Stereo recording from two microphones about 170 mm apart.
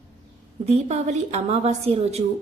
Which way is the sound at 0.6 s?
40° right (ahead or behind).